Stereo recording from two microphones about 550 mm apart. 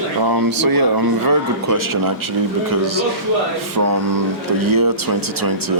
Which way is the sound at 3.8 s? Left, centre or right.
Right.